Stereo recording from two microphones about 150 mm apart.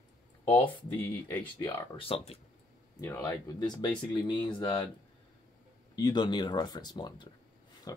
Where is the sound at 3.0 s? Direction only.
15° left (ahead or behind).